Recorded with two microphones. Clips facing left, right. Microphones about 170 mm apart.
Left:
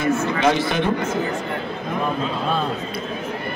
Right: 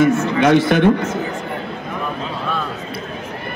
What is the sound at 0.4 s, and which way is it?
Speech, 60° right (ahead or behind).